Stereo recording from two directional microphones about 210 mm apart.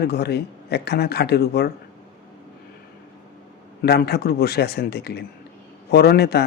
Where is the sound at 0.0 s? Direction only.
50° left (ahead or behind).